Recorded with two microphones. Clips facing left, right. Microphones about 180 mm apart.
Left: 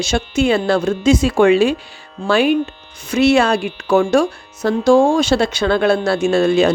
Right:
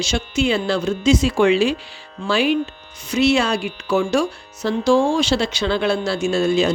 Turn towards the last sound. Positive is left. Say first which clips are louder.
# left 4 dB
turn(degrees=60)  # may be behind; listen again after turning